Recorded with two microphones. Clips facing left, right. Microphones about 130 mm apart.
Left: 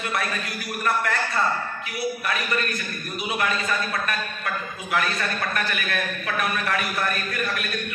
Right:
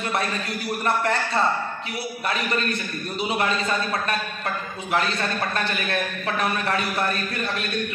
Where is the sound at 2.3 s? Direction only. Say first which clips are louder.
Right 1 dB; 30° right (ahead or behind).